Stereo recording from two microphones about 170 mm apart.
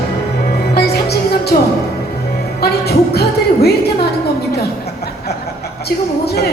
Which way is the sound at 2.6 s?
70° left (ahead or behind).